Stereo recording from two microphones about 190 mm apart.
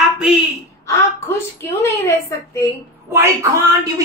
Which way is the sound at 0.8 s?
15° left (ahead or behind).